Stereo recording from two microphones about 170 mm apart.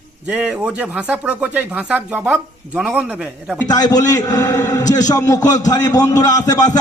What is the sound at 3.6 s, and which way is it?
A man's voice, 20° left (ahead or behind).